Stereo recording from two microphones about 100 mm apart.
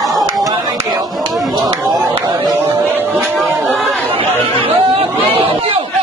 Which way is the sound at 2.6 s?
20° right (ahead or behind).